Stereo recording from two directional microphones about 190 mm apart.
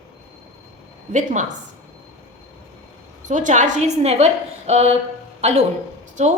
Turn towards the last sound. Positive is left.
turn(degrees=-35)  # may be behind; listen again after turning